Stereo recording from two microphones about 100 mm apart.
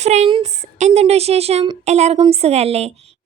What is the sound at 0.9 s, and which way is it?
A woman's voice, 90° right.